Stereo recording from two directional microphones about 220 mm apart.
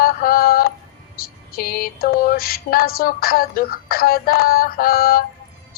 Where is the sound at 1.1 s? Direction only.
45° left (ahead or behind).